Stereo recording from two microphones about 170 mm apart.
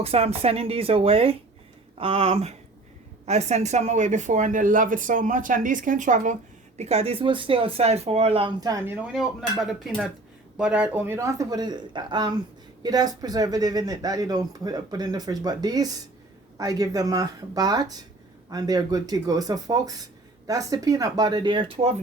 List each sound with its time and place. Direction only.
0.0 s speech: 35° right (ahead or behind)
6.7 s speech: 35° right (ahead or behind); by 9.0 s 10° right (ahead or behind)
9.1 s speech: centre (ahead or behind); by 21.9 s 30° right (ahead or behind)